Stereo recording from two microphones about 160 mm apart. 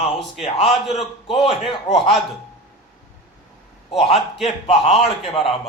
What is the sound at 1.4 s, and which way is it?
Speech, 35° left (ahead or behind).